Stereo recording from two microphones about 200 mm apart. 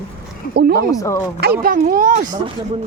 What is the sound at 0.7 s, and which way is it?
Speech, 15° left (ahead or behind).